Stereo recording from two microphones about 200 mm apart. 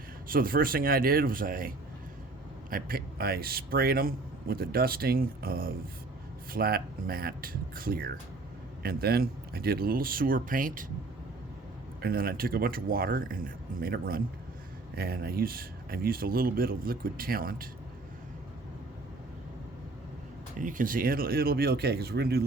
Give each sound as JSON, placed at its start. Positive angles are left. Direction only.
{"t": 0.3, "sound": "speech", "side_deg": -45}
{"t": 11.9, "sound": "speech", "side_deg": -50}
{"t": 20.6, "sound": "speech", "side_deg": -40}